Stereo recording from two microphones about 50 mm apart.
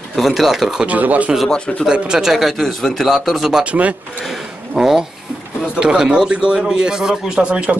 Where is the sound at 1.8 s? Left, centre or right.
Centre.